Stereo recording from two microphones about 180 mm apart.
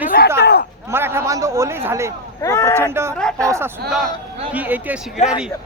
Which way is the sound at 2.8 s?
15° right (ahead or behind).